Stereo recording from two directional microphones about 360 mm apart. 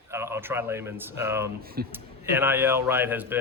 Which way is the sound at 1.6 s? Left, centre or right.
Right.